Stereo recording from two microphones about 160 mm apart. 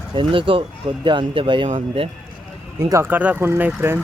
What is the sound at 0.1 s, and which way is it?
Speech, 30° right (ahead or behind).